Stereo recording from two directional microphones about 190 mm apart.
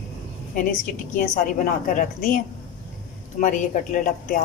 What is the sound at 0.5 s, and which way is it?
A woman's voice, 45° left (ahead or behind).